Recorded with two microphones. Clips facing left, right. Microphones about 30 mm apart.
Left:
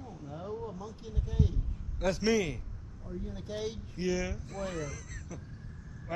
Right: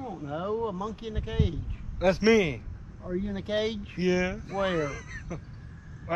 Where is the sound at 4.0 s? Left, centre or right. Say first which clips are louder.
Right 6 dB; right.